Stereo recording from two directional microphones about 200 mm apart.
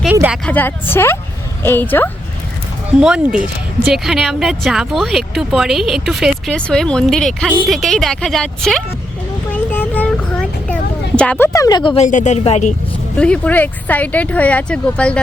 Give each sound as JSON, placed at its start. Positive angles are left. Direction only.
{"t": 0.0, "sound": "speech", "side_deg": -5}
{"t": 0.4, "sound": "speech", "side_deg": 10}
{"t": 3.0, "sound": "speech", "side_deg": -5}
{"t": 9.5, "sound": "vehicle", "side_deg": 10}
{"t": 11.2, "sound": "speech", "side_deg": 10}
{"t": 12.0, "sound": "a woman's voice", "side_deg": 35}
{"t": 13.1, "sound": "speech", "side_deg": 5}